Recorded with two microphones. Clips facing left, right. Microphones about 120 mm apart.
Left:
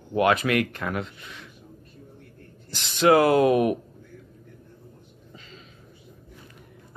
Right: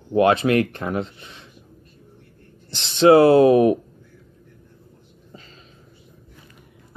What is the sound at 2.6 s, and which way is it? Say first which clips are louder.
Speech: right 5 dB; 25° right (ahead or behind).